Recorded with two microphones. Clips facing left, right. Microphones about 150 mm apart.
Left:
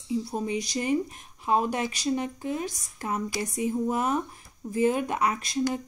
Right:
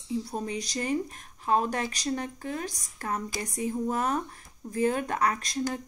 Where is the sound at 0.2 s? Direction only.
5° left (ahead or behind).